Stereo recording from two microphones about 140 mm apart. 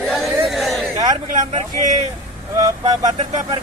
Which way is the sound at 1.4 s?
60° right (ahead or behind).